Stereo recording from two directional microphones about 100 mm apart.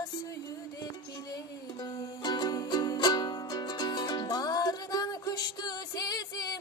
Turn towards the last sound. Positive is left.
turn(degrees=40)  # may be behind; listen again after turning